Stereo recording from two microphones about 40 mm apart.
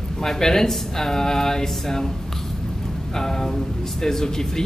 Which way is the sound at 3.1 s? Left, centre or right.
Centre.